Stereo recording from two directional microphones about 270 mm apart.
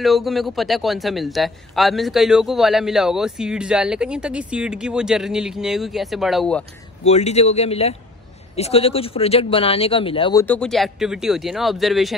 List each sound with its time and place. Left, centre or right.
0.0 s speech: centre
7.1 s speech: left
10.4 s speech: centre